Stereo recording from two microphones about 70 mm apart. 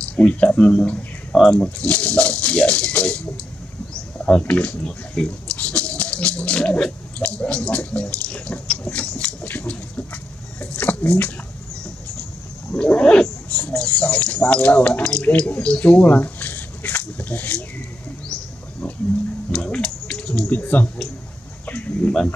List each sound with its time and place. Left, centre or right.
0.0 s speech: centre
4.4 s speech: left
12.7 s speech: centre
19.5 s speech: centre